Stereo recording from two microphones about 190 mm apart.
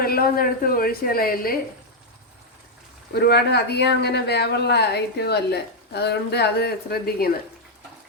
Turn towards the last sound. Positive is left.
turn(degrees=55)  # may be behind; listen again after turning